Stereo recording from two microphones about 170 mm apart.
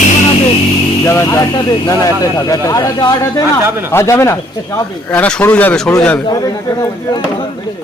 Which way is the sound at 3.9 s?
15° left (ahead or behind).